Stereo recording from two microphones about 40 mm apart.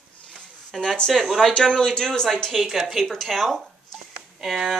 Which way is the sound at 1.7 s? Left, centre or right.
Centre.